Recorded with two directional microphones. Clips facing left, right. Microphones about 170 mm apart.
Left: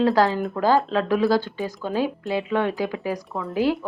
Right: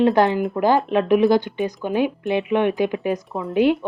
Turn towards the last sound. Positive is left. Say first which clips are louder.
# right 4 dB
turn(degrees=-20)  # may be behind; listen again after turning